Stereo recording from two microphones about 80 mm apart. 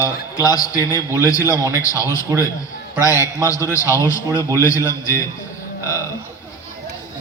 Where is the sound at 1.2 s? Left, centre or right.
Left.